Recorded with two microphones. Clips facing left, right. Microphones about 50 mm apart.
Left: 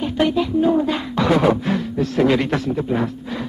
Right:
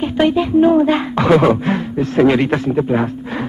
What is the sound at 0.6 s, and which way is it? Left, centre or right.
Speech, right.